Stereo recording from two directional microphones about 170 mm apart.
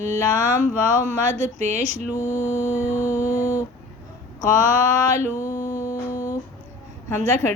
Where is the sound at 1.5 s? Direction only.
40° right (ahead or behind).